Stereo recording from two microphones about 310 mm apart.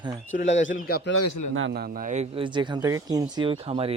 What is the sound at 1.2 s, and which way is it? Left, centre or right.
Speech, left.